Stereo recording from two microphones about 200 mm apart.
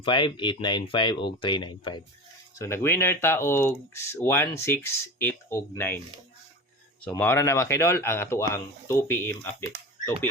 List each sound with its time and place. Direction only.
0.0 s speech: 25° left (ahead or behind)
7.0 s speech: 10° left (ahead or behind)